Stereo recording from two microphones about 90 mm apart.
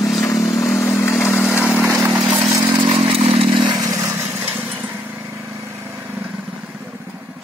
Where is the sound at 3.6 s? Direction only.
45° right (ahead or behind).